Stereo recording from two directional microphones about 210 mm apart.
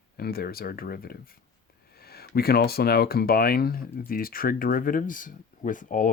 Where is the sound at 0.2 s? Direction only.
45° left (ahead or behind).